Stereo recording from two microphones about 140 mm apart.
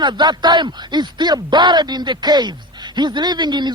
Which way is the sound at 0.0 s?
30° right (ahead or behind).